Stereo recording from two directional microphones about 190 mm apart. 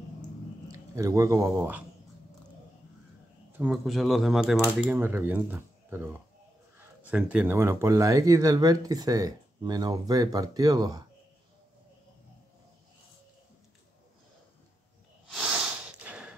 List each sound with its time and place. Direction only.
0.7 s speech: 15° right (ahead or behind)
3.5 s speech: 5° right (ahead or behind)
7.1 s speech: 5° right (ahead or behind)
15.2 s snort: centre (ahead or behind)